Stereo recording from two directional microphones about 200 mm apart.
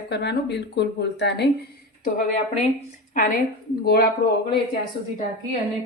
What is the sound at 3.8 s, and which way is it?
Speech, 50° left (ahead or behind).